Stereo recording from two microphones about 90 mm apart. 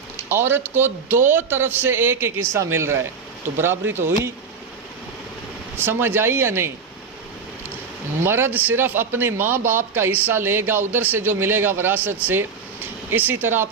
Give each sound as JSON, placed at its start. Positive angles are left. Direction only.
{"t": 0.3, "sound": "speech", "side_deg": -25}
{"t": 5.7, "sound": "speech", "side_deg": -25}
{"t": 8.2, "sound": "speech", "side_deg": -25}